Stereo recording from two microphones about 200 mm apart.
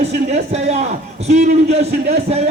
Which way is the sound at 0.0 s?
35° right (ahead or behind).